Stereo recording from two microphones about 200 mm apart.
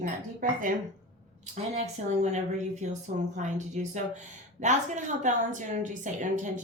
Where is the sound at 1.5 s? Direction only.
35° right (ahead or behind).